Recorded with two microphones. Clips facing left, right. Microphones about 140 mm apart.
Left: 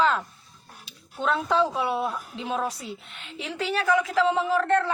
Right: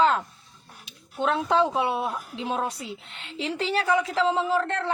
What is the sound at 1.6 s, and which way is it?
A woman's voice, 25° right (ahead or behind).